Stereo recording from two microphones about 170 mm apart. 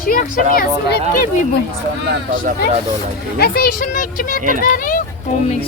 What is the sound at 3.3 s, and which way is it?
A woman's voice, 65° left (ahead or behind).